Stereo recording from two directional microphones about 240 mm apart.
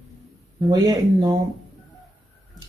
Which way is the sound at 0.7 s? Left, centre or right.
Centre.